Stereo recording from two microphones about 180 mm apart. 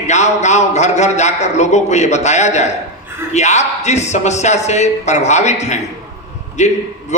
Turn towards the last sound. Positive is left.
turn(degrees=40)  # may be behind; listen again after turning